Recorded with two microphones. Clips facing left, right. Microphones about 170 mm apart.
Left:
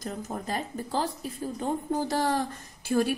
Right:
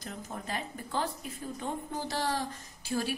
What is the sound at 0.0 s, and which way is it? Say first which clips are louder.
Speech: left 6 dB; 40° left (ahead or behind).